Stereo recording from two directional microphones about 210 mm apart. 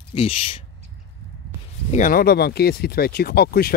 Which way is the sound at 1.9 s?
40° left (ahead or behind).